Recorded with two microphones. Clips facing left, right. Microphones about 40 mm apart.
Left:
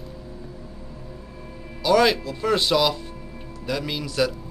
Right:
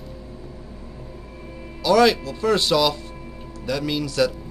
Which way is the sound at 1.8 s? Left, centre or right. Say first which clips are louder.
Right 2 dB; centre.